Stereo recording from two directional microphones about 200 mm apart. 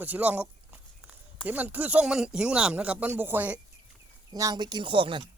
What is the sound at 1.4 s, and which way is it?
Speech, 10° right (ahead or behind).